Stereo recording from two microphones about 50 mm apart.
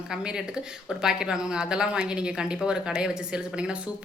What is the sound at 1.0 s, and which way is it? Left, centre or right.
A woman's voice, centre.